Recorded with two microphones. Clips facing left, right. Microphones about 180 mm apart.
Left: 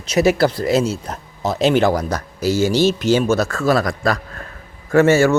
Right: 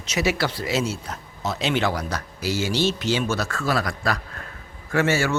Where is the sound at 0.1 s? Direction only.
40° left (ahead or behind).